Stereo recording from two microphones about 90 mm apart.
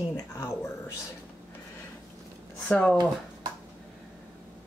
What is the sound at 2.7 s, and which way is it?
Speech, 10° left (ahead or behind).